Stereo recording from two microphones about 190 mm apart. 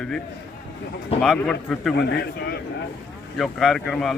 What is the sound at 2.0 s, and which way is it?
Speech, 60° left (ahead or behind).